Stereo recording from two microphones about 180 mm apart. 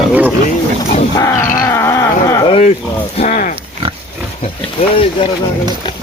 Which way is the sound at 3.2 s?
45° left (ahead or behind).